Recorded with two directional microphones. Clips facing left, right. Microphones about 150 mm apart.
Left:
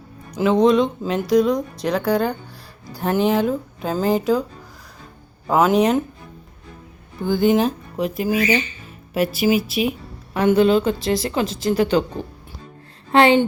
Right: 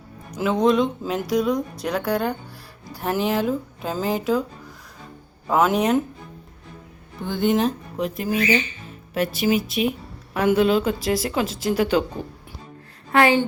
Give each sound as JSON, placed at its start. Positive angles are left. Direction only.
{"t": 0.6, "sound": "a woman's voice", "side_deg": -5}
{"t": 5.5, "sound": "a woman's voice", "side_deg": 0}
{"t": 7.2, "sound": "a woman's voice", "side_deg": 0}
{"t": 13.1, "sound": "a woman's voice", "side_deg": 25}